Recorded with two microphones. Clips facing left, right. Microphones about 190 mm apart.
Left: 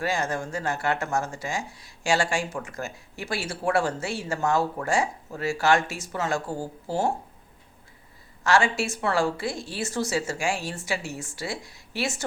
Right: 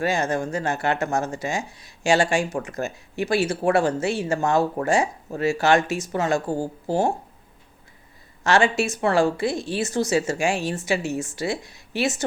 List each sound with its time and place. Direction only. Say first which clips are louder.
0.0 s speech: right 4 dB; 20° right (ahead or behind)
8.4 s speech: right 3 dB; 20° right (ahead or behind)